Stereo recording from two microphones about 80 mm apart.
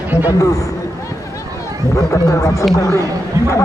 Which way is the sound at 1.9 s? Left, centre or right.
Left.